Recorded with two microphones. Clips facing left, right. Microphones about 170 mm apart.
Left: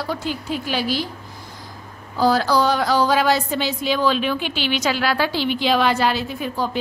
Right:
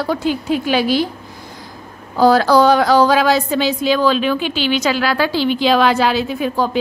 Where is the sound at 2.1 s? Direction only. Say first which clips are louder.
Right 6 dB; 65° right (ahead or behind); by 3.4 s 90° right.